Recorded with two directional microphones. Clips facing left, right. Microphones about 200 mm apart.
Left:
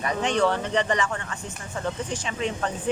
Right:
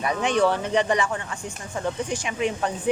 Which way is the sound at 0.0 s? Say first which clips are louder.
Right 2 dB; 10° right (ahead or behind).